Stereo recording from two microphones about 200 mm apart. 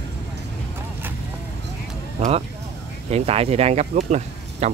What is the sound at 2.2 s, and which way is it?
Speech, 30° right (ahead or behind).